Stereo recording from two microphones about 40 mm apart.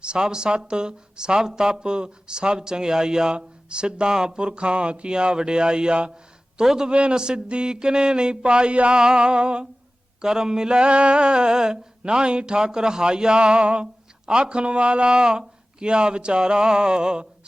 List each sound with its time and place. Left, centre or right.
0.0 s a woman's voice: right